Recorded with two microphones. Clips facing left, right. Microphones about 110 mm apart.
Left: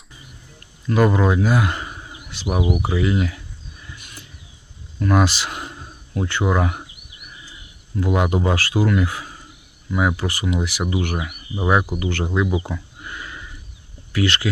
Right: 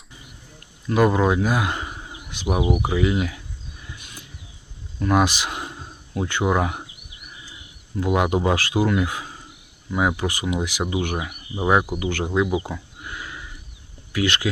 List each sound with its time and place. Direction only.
0.9 s speech: 15° right (ahead or behind)
3.9 s a sound: 15° right (ahead or behind)
4.9 s speech: 15° right (ahead or behind)
7.9 s speech: 15° right (ahead or behind)
12.5 s a sound: 10° right (ahead or behind)
14.1 s speech: 15° right (ahead or behind)